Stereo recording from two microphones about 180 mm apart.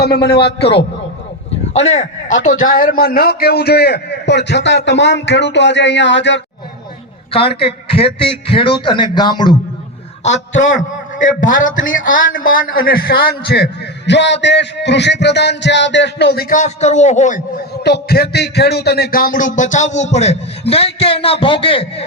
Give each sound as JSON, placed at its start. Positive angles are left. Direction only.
{"t": 0.0, "sound": "a man's voice", "side_deg": 65}
{"t": 1.7, "sound": "a man's voice", "side_deg": 35}
{"t": 7.3, "sound": "a man's voice", "side_deg": 30}
{"t": 11.2, "sound": "a man's voice", "side_deg": 45}
{"t": 14.1, "sound": "music", "side_deg": 75}
{"t": 17.8, "sound": "a man's voice", "side_deg": 65}